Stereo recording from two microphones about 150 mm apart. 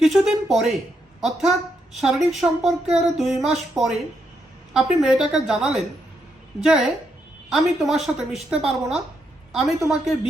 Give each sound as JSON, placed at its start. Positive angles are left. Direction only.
{"t": 0.0, "sound": "a woman's voice", "side_deg": 0}